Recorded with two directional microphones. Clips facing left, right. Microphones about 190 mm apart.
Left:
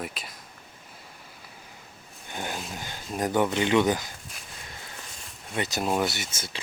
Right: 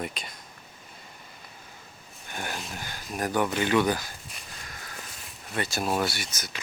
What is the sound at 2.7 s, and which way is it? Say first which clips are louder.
Speech: left 2 dB; 20° left (ahead or behind).